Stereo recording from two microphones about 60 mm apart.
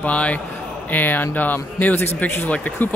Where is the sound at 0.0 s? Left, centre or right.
Left.